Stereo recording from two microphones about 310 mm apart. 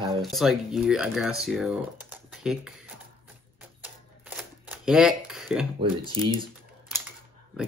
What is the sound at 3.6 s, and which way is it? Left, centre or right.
Typewriter, centre.